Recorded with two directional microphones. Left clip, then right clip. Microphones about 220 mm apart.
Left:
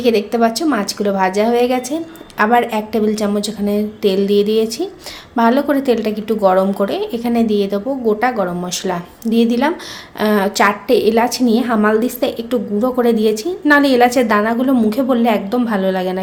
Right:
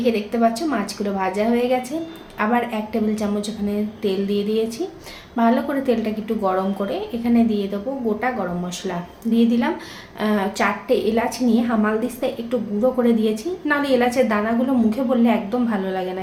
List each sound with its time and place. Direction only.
0.0 s a woman's voice: 45° left (ahead or behind)
9.3 s a woman's voice: 45° left (ahead or behind)